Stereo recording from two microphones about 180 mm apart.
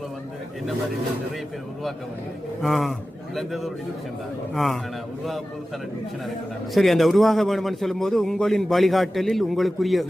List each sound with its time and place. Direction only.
2.6 s a man's voice: centre (ahead or behind)
6.7 s a man's voice: centre (ahead or behind)